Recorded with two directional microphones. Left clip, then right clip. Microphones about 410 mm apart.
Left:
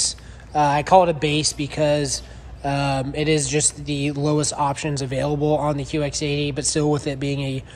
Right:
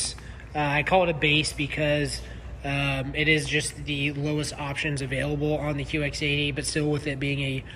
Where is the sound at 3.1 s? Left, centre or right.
Left.